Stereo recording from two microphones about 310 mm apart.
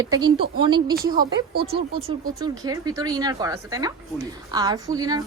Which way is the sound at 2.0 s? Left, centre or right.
Centre.